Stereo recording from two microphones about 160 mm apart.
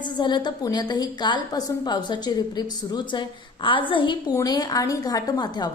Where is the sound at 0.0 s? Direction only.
30° left (ahead or behind).